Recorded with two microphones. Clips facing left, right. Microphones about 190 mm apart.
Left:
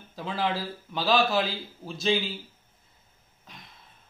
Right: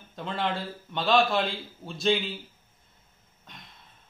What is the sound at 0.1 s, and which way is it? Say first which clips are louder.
A man's voice: left 1 dB; centre (ahead or behind).